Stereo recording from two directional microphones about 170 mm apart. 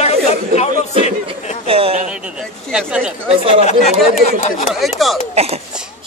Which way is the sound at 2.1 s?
5° right (ahead or behind).